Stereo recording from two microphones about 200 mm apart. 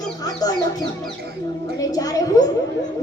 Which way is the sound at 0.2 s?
20° left (ahead or behind).